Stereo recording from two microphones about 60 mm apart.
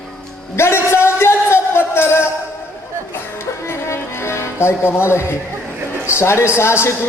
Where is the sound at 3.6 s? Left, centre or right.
Left.